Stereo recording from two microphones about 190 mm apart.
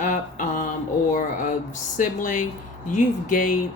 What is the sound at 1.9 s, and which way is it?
Speech, 45° left (ahead or behind).